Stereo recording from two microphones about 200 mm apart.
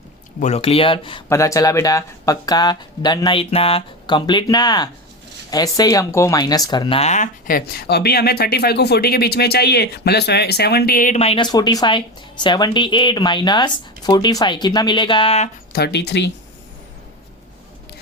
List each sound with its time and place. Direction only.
0.3 s speech: 35° left (ahead or behind)
1.3 s speech: 15° left (ahead or behind)
15.7 s speech: 55° left (ahead or behind)